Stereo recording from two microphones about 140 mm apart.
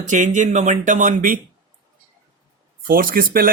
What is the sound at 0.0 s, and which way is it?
Speech, 60° right (ahead or behind).